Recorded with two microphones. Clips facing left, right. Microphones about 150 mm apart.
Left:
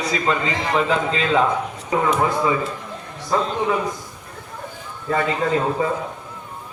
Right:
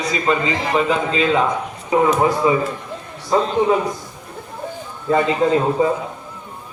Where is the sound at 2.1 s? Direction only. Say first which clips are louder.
Right 3 dB; 20° right (ahead or behind).